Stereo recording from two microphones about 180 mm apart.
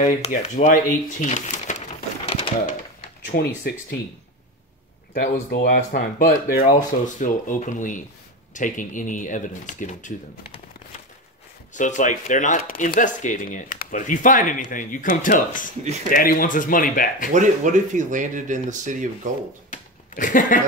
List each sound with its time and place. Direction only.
0.0 s speech: 40° left (ahead or behind)
3.3 s speech: 55° left (ahead or behind)
5.2 s speech: 60° left (ahead or behind)
5.9 s speech: 45° left (ahead or behind)
11.7 s speech: 45° left (ahead or behind)
17.3 s speech: 45° right (ahead or behind)
19.7 s a sound: 45° left (ahead or behind)